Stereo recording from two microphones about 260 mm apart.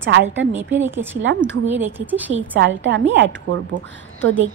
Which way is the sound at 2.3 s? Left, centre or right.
Right.